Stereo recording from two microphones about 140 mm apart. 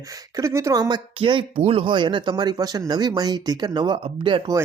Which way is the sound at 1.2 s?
35° right (ahead or behind).